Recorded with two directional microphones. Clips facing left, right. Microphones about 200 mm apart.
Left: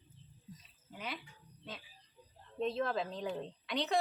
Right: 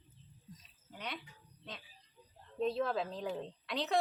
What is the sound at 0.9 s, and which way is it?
Speech, 5° left (ahead or behind).